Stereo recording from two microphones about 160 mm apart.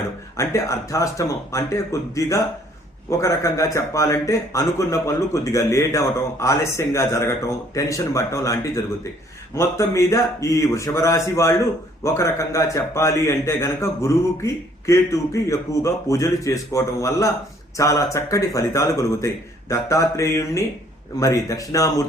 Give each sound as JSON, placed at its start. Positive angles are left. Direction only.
{"t": 0.3, "sound": "a man's voice", "side_deg": 20}